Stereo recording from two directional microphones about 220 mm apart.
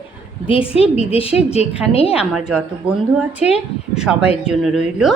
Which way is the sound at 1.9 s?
25° left (ahead or behind).